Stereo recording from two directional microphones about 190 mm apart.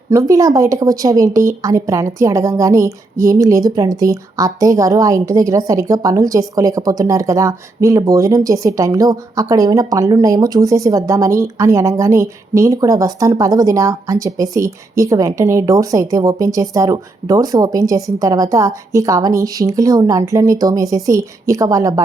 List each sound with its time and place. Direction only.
0.1 s a woman's voice: 15° right (ahead or behind)